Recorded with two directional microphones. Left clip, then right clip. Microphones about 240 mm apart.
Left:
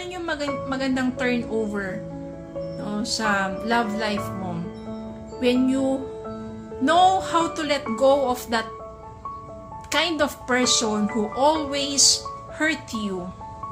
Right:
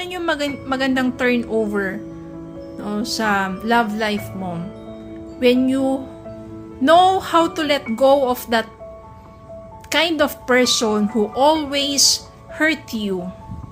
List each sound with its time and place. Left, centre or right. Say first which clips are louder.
0.0 s speech: right 6 dB; right
9.9 s speech: right 5 dB; right